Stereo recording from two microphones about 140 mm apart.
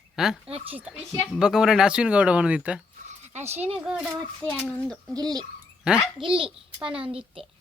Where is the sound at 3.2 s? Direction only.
55° right (ahead or behind).